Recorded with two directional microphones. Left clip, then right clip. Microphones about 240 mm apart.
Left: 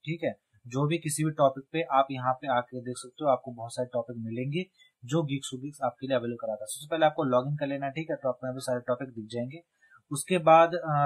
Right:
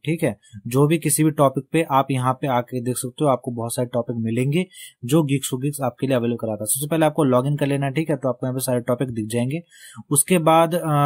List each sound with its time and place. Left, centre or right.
0.0 s speech: right